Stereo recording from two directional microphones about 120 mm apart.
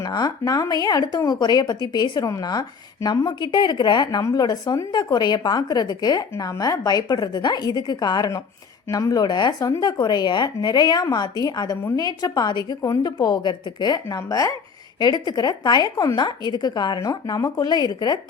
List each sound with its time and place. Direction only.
0.0 s speech: 35° left (ahead or behind)